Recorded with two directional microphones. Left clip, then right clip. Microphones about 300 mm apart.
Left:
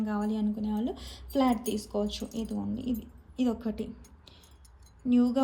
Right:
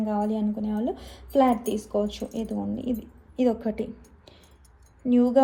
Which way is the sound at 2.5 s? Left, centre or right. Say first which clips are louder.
Right 5 dB; centre.